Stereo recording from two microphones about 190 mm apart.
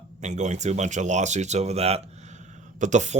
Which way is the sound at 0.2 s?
40° right (ahead or behind).